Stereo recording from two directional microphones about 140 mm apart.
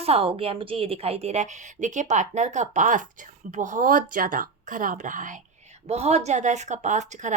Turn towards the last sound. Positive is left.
turn(degrees=-60)  # may be behind; listen again after turning